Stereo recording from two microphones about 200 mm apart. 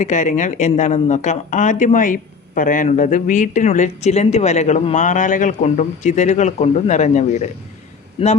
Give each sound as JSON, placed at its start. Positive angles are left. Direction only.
{"t": 0.0, "sound": "speech", "side_deg": 35}